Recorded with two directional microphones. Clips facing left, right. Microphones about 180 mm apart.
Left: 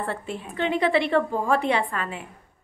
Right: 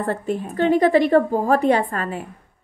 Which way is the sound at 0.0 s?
40° right (ahead or behind).